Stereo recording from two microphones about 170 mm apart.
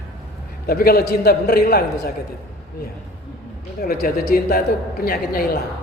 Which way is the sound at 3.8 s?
60° left (ahead or behind).